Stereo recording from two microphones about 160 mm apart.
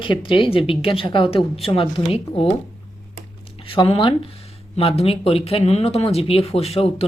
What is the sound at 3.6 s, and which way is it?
Speech, 35° left (ahead or behind).